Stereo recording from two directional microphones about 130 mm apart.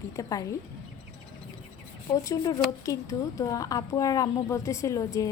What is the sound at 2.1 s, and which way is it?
A woman's voice, 25° left (ahead or behind).